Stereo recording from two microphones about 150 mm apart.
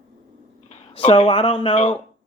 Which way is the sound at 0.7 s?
45° left (ahead or behind).